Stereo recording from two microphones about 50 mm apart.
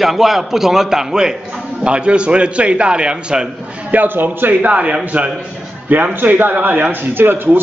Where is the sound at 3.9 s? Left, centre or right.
Right.